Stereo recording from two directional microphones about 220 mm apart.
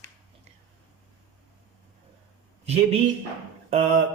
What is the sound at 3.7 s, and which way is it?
Speech, 30° right (ahead or behind).